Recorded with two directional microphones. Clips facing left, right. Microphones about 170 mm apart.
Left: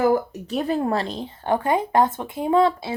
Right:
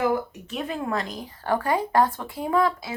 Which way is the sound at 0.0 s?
35° left (ahead or behind).